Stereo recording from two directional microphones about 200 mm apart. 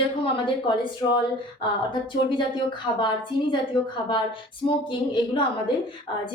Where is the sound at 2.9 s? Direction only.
25° left (ahead or behind).